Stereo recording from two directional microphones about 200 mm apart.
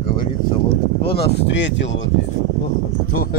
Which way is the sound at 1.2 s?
60° left (ahead or behind).